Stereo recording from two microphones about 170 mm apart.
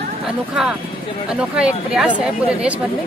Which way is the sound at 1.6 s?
5° right (ahead or behind).